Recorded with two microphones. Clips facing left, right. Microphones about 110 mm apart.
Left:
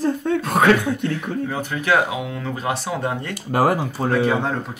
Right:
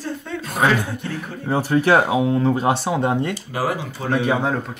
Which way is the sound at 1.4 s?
35° right (ahead or behind).